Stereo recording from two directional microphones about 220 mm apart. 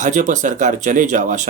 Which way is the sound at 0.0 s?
35° right (ahead or behind).